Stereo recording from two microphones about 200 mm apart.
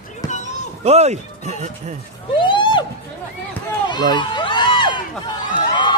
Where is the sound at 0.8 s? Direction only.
30° right (ahead or behind).